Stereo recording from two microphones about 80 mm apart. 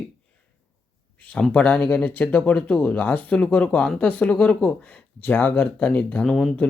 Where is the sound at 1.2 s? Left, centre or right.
Centre.